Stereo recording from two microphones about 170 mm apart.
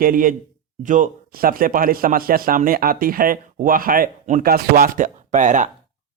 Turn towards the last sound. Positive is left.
turn(degrees=-45)  # may be behind; listen again after turning